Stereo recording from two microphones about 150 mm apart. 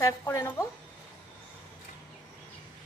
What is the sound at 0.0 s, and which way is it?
Speech, 20° left (ahead or behind).